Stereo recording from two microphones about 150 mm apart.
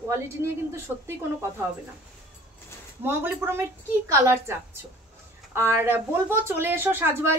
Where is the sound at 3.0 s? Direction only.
15° right (ahead or behind).